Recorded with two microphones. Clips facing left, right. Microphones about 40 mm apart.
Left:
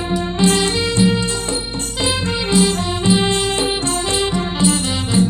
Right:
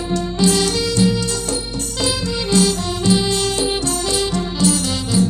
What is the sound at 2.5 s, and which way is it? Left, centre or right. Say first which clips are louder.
Music: even; centre.